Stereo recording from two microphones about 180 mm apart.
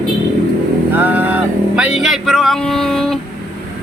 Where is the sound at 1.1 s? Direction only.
10° right (ahead or behind).